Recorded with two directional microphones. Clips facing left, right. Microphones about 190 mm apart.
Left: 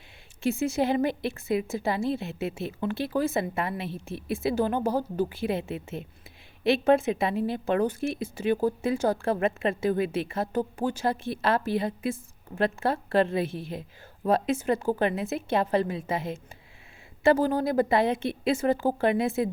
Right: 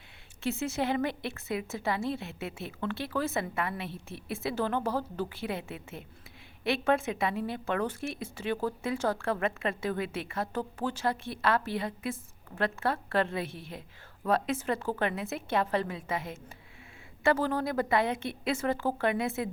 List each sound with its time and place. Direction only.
0.8 s a woman's voice: 20° left (ahead or behind)